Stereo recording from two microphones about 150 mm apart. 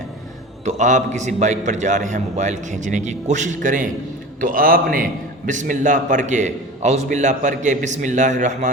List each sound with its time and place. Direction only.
0.6 s a man's voice: 50° right (ahead or behind); by 5.0 s 70° right (ahead or behind)
5.5 s a man's voice: 55° right (ahead or behind)